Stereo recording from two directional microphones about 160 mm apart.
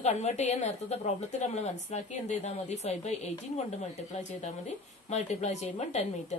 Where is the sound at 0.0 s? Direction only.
45° left (ahead or behind).